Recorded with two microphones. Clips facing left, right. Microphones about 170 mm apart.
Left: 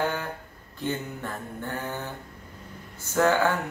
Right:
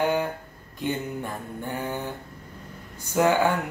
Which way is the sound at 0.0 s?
15° right (ahead or behind).